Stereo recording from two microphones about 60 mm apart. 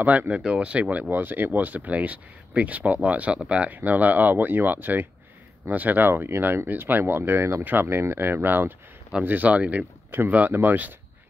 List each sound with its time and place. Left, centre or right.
0.0 s speech: right
0.4 s speech: centre; by 10.8 s right